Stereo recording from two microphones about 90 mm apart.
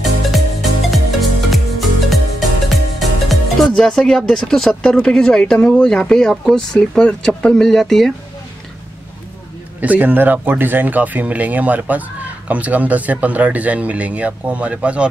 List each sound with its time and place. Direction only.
0.0 s music: centre (ahead or behind)
9.8 s speech: 15° right (ahead or behind)